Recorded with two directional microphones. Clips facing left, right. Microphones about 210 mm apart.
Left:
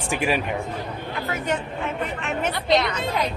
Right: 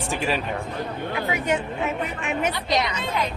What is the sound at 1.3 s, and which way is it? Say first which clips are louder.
A woman's voice: right 1 dB; 10° right (ahead or behind).